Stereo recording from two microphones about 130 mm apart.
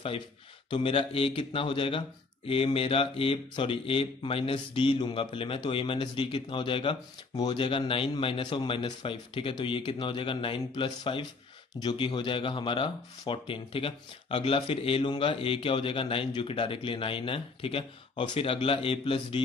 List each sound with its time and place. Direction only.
0.7 s speech: 45° left (ahead or behind)